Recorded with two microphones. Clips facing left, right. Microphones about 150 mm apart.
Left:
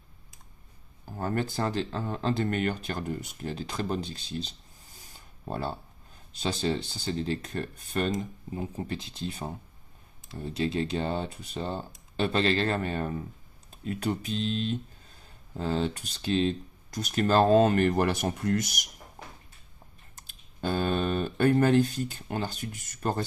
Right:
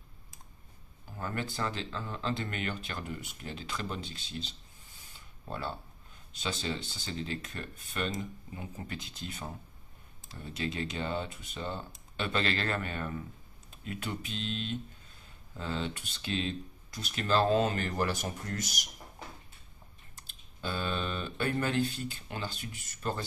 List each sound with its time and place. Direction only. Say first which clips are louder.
1.0 s speech: left 7 dB; 40° left (ahead or behind); by 18.8 s 60° left (ahead or behind)
20.2 s speech: left 8 dB; 50° left (ahead or behind)